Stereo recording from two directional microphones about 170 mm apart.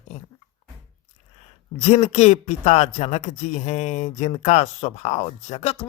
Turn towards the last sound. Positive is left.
turn(degrees=35)  # may be behind; listen again after turning